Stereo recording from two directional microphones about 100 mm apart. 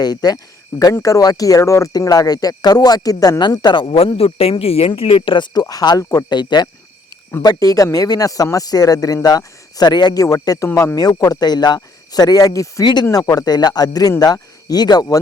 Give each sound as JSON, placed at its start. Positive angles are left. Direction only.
{"t": 0.0, "sound": "speech", "side_deg": 40}
{"t": 3.9, "sound": "speech", "side_deg": 90}
{"t": 5.6, "sound": "speech", "side_deg": 40}
{"t": 7.4, "sound": "speech", "side_deg": 35}